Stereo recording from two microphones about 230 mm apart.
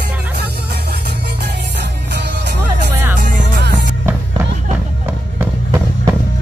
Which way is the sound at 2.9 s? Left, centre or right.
Centre.